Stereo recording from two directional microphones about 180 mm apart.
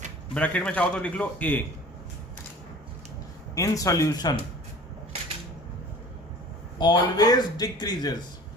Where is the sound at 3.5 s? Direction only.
20° left (ahead or behind).